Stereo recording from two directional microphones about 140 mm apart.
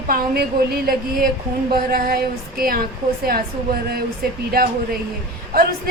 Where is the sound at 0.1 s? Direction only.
90° right.